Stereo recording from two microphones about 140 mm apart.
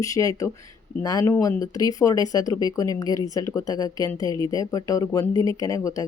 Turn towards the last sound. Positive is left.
turn(degrees=25)  # may be behind; listen again after turning